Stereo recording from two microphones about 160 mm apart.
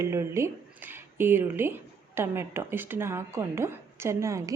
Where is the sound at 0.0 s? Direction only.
15° right (ahead or behind).